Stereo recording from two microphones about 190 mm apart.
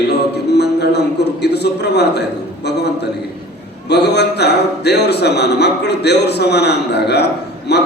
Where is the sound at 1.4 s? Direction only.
60° left (ahead or behind).